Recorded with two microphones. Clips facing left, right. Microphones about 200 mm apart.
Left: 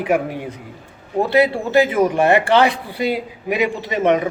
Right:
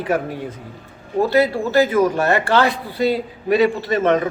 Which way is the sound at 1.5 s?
15° left (ahead or behind).